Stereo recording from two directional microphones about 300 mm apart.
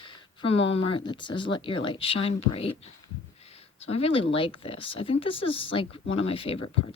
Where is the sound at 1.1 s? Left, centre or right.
Centre.